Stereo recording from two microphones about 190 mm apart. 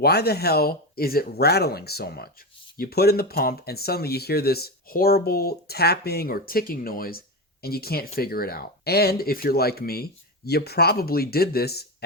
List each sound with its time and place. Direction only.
0.0 s speech: 55° left (ahead or behind)